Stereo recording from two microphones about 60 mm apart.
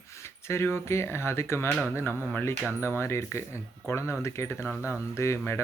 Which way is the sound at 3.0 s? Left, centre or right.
Left.